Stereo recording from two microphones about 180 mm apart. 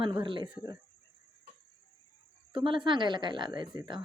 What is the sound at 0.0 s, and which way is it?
Speech, 30° right (ahead or behind).